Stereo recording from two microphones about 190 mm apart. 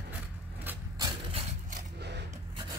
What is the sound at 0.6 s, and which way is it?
Vehicle, 20° right (ahead or behind).